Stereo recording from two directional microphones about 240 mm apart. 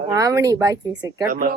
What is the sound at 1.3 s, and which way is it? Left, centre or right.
Speech, right.